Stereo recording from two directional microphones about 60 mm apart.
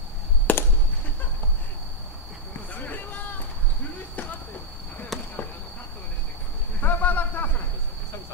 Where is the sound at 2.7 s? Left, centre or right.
Left.